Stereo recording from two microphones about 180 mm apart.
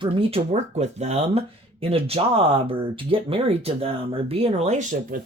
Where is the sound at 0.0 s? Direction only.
30° right (ahead or behind).